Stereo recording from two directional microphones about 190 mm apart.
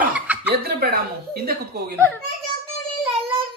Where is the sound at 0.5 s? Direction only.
55° right (ahead or behind).